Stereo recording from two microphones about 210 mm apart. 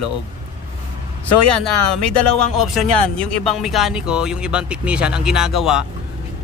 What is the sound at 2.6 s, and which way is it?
Speech, centre (ahead or behind).